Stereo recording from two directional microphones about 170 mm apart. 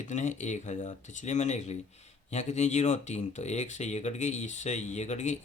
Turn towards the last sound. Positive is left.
turn(degrees=45)  # may be behind; listen again after turning